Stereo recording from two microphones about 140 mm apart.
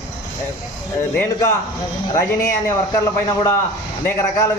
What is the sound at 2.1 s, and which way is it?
A man's voice, 20° left (ahead or behind).